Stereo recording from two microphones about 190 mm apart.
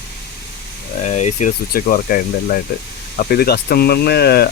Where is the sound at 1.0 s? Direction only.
35° left (ahead or behind).